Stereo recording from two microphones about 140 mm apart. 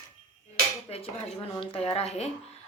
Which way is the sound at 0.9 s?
45° left (ahead or behind).